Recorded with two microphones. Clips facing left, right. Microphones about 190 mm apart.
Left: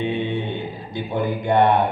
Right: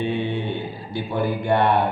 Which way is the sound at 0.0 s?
20° left (ahead or behind).